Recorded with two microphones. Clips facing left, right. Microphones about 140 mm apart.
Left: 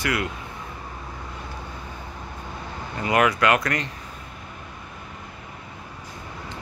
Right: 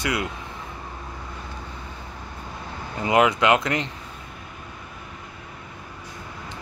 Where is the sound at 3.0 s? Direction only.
20° right (ahead or behind).